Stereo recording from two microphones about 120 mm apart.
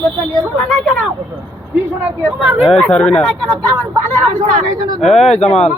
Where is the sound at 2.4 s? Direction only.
10° right (ahead or behind).